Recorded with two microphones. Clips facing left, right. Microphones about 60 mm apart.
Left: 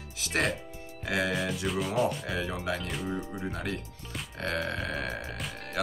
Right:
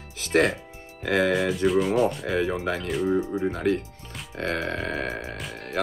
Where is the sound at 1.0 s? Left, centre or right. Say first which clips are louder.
Right 7 dB; right.